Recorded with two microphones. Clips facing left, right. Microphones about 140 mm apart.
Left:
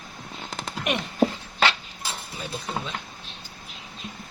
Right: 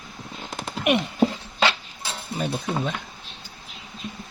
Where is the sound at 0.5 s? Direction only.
Centre (ahead or behind).